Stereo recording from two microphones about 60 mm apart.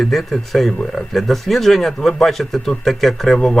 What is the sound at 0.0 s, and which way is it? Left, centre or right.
Speech, centre.